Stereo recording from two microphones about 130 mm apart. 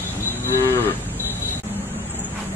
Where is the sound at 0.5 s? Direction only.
15° left (ahead or behind).